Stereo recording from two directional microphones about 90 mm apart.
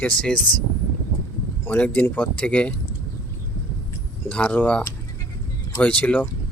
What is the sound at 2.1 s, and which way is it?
Speech, 15° left (ahead or behind).